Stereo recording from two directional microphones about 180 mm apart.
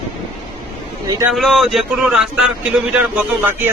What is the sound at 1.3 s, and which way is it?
Mantra, centre (ahead or behind).